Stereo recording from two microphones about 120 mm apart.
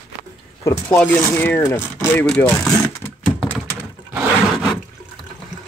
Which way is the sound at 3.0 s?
20° left (ahead or behind).